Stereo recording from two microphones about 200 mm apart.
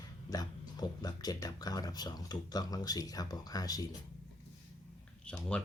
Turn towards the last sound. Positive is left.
turn(degrees=5)  # may be behind; listen again after turning